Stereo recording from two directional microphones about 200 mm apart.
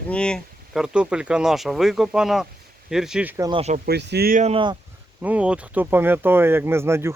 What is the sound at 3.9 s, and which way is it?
Speech, 55° right (ahead or behind).